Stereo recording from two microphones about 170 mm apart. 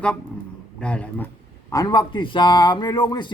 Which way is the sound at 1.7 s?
25° left (ahead or behind).